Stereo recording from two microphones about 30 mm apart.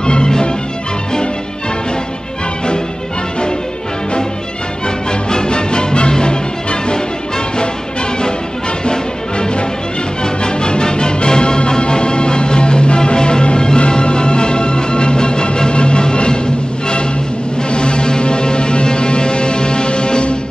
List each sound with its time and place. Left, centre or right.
0.0 s music: left
5.3 s music: left
8.8 s music: left
17.6 s music: left